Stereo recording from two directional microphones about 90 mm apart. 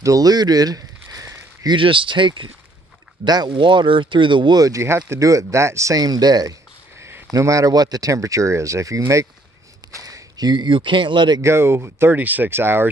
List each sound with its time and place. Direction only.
0.0 s a sound: 45° right (ahead or behind)
1.7 s speech: 70° right (ahead or behind)
3.3 s speech: 50° right (ahead or behind)
3.5 s speech: 65° right (ahead or behind)
4.6 s speech: 35° right (ahead or behind)
7.0 s a sound: 25° right (ahead or behind)
7.3 s speech: 40° right (ahead or behind); by 11.4 s 55° right (ahead or behind)
11.4 s speech: 30° right (ahead or behind)